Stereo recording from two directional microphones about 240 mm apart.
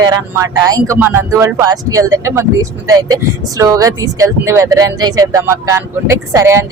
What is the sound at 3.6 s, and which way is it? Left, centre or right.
Speech, centre.